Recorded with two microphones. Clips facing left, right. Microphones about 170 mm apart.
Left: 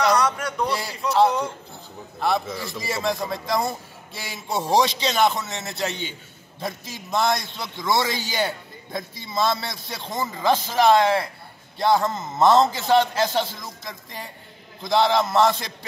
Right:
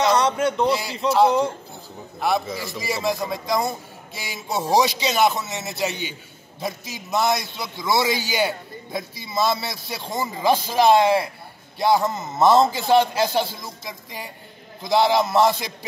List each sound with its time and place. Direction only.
0.0 s a sound: 25° right (ahead or behind)
1.0 s speech: 25° right (ahead or behind)
2.1 s a man's voice: 5° right (ahead or behind)